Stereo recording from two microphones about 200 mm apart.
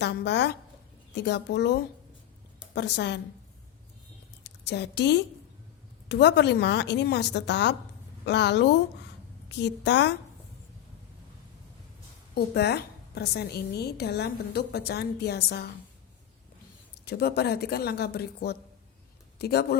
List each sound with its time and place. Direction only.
0.0 s a woman's voice: 55° left (ahead or behind)
4.4 s a woman's voice: 55° left (ahead or behind)
12.3 s a woman's voice: 55° left (ahead or behind)
17.1 s speech: 55° left (ahead or behind)